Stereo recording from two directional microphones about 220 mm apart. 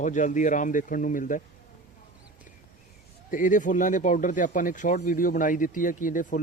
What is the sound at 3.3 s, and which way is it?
Speech, 35° left (ahead or behind).